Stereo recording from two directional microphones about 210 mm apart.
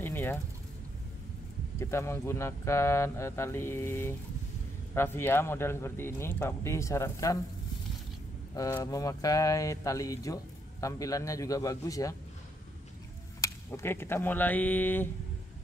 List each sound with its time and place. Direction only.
0.0 s a sound: 10° left (ahead or behind)
1.8 s speech: 10° left (ahead or behind)
8.5 s speech: 15° left (ahead or behind)
13.4 s speech: 15° left (ahead or behind)